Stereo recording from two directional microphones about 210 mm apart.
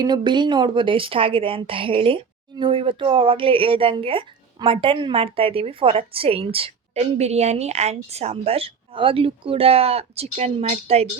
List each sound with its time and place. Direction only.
0.0 s a woman's voice: 20° right (ahead or behind)